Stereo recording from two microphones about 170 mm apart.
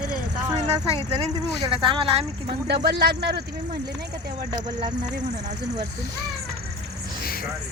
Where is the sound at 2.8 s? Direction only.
75° right (ahead or behind).